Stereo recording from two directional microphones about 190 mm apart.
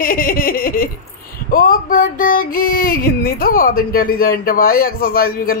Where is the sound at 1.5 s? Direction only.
50° left (ahead or behind).